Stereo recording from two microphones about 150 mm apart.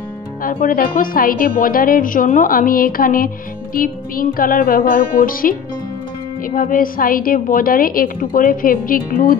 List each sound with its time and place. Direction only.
0.4 s a woman's voice: 65° left (ahead or behind)